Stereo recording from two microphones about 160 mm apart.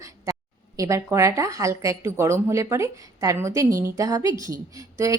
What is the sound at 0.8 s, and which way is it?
A woman's voice, 20° right (ahead or behind).